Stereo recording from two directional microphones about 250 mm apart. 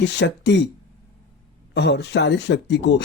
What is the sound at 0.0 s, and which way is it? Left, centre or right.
Speech, left.